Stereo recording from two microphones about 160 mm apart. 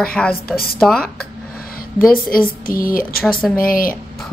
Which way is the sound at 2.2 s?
60° left (ahead or behind).